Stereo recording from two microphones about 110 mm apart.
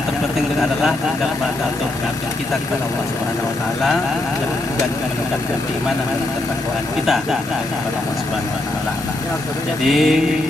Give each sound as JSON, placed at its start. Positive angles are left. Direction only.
{"t": 9.8, "sound": "vehicle", "side_deg": 0}